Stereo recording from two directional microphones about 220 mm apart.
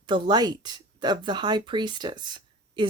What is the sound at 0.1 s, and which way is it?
Speech, 20° right (ahead or behind).